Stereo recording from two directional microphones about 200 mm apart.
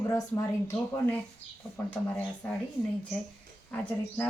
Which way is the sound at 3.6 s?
5° left (ahead or behind).